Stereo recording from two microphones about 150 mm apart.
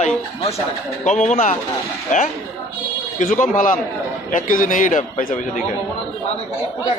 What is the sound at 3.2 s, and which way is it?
A man's voice, 60° left (ahead or behind).